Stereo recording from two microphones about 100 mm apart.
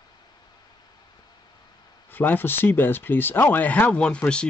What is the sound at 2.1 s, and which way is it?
Speech, 20° left (ahead or behind).